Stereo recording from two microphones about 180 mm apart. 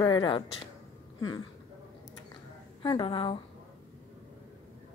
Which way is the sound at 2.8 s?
25° left (ahead or behind).